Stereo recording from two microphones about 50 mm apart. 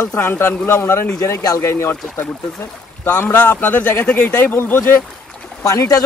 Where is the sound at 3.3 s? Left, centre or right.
Left.